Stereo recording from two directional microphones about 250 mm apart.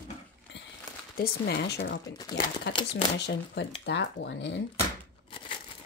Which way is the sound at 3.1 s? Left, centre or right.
Left.